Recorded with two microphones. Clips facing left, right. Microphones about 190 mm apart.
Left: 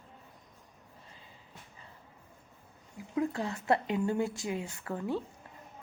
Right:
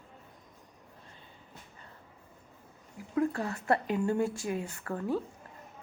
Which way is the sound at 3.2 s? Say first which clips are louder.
Right 2 dB; 20° left (ahead or behind).